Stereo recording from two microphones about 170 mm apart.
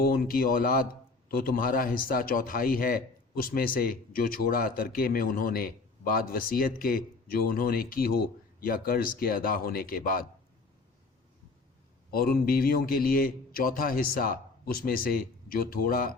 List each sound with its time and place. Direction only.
0.0 s a man's voice: 60° left (ahead or behind)
12.1 s a man's voice: 60° left (ahead or behind)